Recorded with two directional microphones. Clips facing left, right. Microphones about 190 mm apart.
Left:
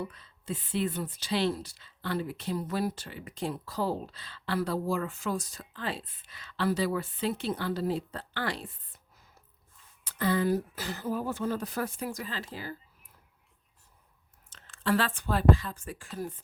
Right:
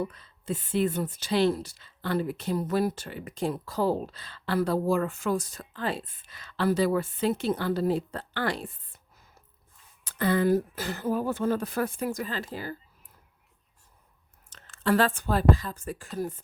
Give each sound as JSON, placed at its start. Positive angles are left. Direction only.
{"t": 0.0, "sound": "speech", "side_deg": -45}
{"t": 10.0, "sound": "speech", "side_deg": -55}
{"t": 14.5, "sound": "speech", "side_deg": -45}